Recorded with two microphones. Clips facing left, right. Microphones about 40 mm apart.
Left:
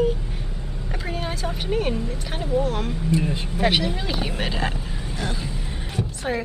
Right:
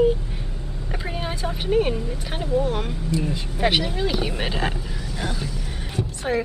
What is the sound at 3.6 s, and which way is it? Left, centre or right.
Speech, centre.